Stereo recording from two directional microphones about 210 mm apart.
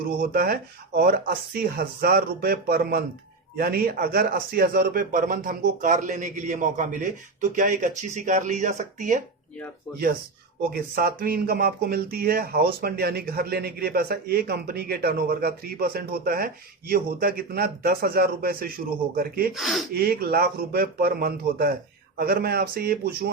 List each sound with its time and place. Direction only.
0.2 s speech: 45° right (ahead or behind)
10.6 s speech: 45° right (ahead or behind)
19.5 s speech: centre (ahead or behind)
19.9 s speech: 45° right (ahead or behind)